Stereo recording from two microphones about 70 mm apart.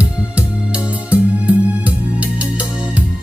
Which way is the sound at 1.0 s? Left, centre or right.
Right.